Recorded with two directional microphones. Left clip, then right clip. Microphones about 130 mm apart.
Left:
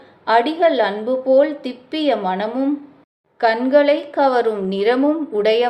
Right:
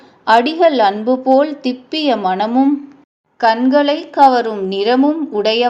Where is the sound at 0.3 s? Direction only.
45° right (ahead or behind).